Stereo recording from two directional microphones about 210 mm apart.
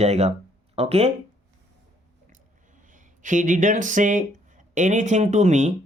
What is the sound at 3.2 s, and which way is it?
Speech, 35° right (ahead or behind).